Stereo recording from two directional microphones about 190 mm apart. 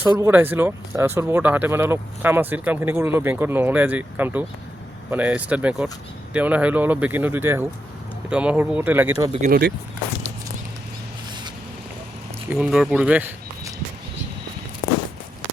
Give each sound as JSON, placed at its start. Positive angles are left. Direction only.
{"t": 0.2, "sound": "speech", "side_deg": -10}
{"t": 9.1, "sound": "speech", "side_deg": -20}
{"t": 9.4, "sound": "speech", "side_deg": -55}
{"t": 12.5, "sound": "speech", "side_deg": -5}